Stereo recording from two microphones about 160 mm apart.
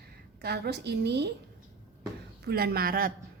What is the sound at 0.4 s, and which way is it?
Speech, 90° right.